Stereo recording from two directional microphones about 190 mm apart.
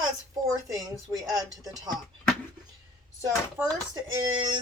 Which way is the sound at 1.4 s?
20° right (ahead or behind).